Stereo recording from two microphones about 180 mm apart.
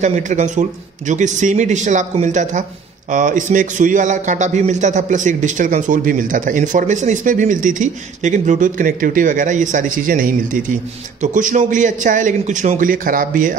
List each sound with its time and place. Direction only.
0.0 s a man's voice: 40° right (ahead or behind)